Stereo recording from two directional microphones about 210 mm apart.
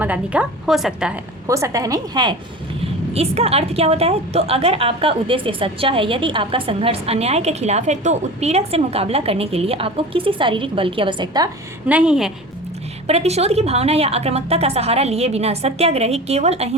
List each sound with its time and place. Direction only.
0.0 s a woman's voice: 5° right (ahead or behind)
1.5 s a woman's voice: 15° right (ahead or behind)
2.8 s a woman's voice: 30° right (ahead or behind)
11.9 s a woman's voice: 5° right (ahead or behind)
13.1 s a woman's voice: 30° right (ahead or behind)